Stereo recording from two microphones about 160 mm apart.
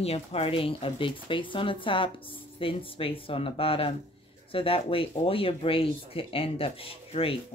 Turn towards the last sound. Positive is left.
turn(degrees=35)  # may be behind; listen again after turning